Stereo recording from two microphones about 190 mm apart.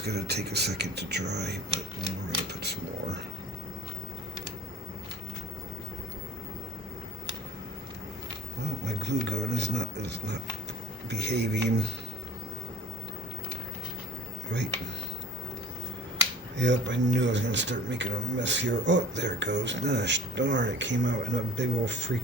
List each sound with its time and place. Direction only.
0.0 s speech: 60° right (ahead or behind)
8.8 s speech: 65° right (ahead or behind)
16.6 s a man's voice: 70° right (ahead or behind)